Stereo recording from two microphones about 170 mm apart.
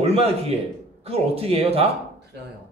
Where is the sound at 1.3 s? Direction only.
35° right (ahead or behind).